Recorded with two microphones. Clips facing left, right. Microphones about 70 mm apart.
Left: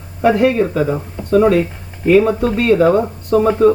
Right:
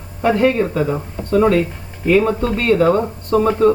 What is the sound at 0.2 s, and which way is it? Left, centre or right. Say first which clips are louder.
Speech: left 2 dB; centre.